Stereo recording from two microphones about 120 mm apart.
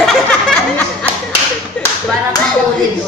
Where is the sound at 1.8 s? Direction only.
10° left (ahead or behind).